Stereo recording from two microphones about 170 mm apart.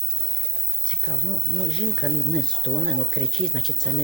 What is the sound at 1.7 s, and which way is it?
Speech, centre (ahead or behind).